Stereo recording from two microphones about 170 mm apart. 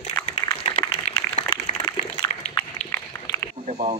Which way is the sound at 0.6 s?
40° left (ahead or behind).